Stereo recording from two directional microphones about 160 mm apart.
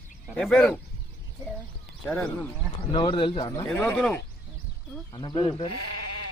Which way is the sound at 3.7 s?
10° left (ahead or behind).